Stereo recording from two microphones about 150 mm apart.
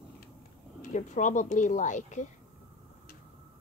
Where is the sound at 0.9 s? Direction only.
55° left (ahead or behind).